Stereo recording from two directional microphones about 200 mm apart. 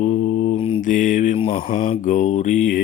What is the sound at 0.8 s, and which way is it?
Speech, 40° left (ahead or behind).